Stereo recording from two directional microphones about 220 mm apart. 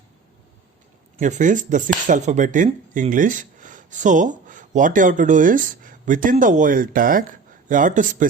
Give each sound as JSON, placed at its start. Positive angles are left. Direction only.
{"t": 1.1, "sound": "speech", "side_deg": -35}